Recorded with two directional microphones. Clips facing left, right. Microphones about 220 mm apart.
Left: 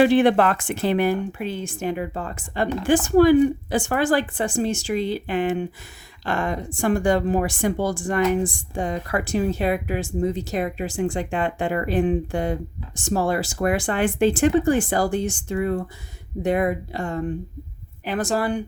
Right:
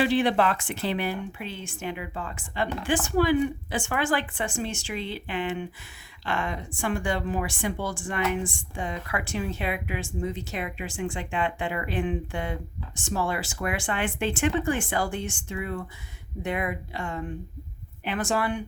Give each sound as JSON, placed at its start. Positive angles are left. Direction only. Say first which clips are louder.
{"t": 0.0, "sound": "speech", "louder": "left 7 dB", "side_deg": 50}